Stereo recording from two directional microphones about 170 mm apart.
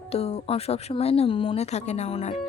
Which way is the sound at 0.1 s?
35° left (ahead or behind).